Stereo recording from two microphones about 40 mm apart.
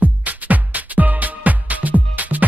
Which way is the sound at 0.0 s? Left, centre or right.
Right.